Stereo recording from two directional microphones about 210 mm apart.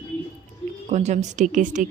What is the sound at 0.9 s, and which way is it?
Speech, 35° right (ahead or behind).